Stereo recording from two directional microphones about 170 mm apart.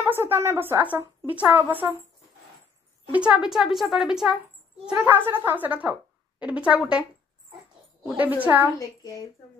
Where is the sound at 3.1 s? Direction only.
5° right (ahead or behind).